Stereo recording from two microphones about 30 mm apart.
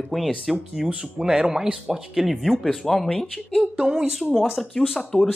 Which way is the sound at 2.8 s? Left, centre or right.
Centre.